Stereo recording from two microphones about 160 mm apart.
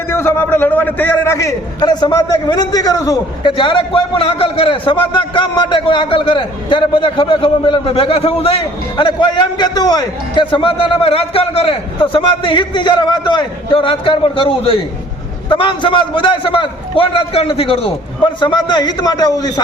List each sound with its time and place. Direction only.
0.1 s a man's voice: 15° left (ahead or behind)